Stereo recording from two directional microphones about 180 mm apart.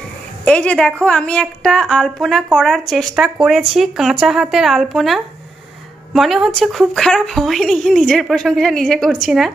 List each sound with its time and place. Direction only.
0.5 s a woman's voice: 5° left (ahead or behind)